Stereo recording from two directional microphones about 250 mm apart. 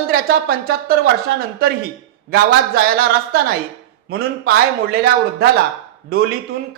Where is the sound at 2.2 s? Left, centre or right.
Right.